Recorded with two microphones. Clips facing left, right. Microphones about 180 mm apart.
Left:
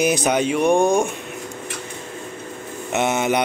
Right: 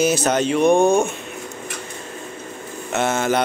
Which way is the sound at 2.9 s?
15° left (ahead or behind).